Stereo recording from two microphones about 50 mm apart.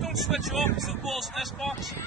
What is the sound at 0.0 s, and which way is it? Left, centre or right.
Speech, centre.